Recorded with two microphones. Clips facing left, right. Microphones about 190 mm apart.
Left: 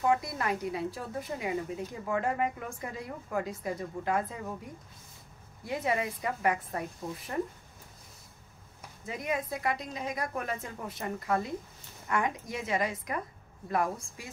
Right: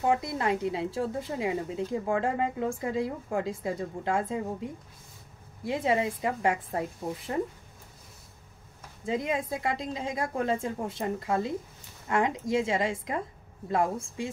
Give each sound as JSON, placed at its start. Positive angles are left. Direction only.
{"t": 0.0, "sound": "speech", "side_deg": -25}
{"t": 9.0, "sound": "speech", "side_deg": -25}